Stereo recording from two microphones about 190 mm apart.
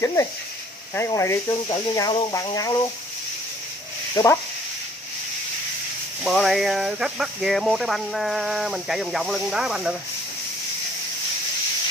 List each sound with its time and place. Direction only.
0.0 s speech: 15° left (ahead or behind)
4.1 s speech: 20° left (ahead or behind)
6.2 s speech: centre (ahead or behind)